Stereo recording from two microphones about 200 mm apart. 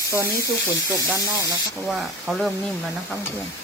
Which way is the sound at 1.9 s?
5° right (ahead or behind).